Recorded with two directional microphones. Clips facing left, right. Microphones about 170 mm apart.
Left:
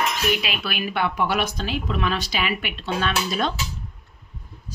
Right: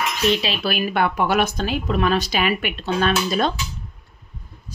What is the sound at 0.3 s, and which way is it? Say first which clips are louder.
A woman's voice: right 4 dB; 30° right (ahead or behind).